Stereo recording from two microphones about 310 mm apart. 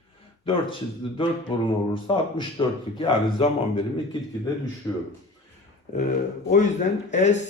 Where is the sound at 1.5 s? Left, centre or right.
Centre.